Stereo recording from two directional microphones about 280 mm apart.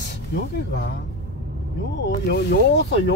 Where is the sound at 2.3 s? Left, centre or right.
Left.